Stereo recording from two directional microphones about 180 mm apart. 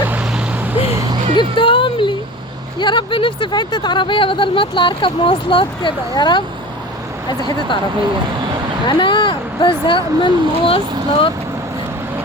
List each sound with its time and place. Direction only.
0.1 s vehicle: 10° right (ahead or behind)
1.4 s speech: 30° left (ahead or behind)
8.9 s speech: 25° left (ahead or behind)